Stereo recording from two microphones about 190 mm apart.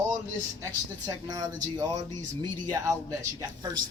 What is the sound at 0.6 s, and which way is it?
Speech, 20° right (ahead or behind).